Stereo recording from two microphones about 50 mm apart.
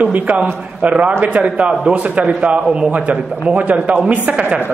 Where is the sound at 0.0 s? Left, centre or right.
Right.